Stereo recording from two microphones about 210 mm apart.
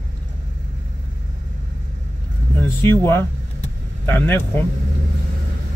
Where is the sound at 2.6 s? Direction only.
10° left (ahead or behind).